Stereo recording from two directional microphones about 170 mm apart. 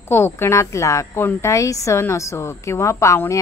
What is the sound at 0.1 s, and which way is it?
Speech, 15° left (ahead or behind).